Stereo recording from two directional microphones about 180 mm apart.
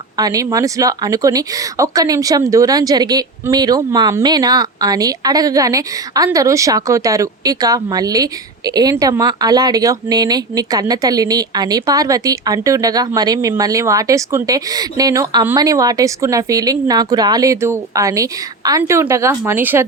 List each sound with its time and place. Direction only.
0.2 s speech: 20° right (ahead or behind)